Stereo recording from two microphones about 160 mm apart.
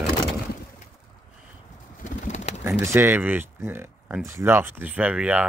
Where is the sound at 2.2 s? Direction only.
45° left (ahead or behind).